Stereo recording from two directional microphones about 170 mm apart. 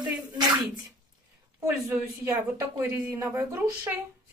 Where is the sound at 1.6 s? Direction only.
20° right (ahead or behind).